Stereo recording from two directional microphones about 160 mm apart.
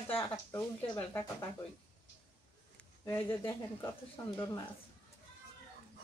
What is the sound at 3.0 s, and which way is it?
Speech, 15° left (ahead or behind).